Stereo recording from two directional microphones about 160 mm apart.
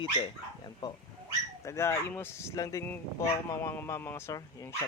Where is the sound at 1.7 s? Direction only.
15° left (ahead or behind).